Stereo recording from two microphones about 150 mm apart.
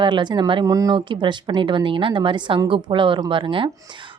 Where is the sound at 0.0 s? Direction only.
30° right (ahead or behind).